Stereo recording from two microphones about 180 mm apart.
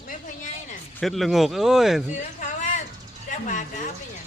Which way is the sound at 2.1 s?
45° left (ahead or behind).